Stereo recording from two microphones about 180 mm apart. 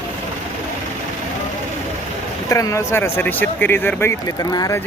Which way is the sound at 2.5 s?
15° left (ahead or behind).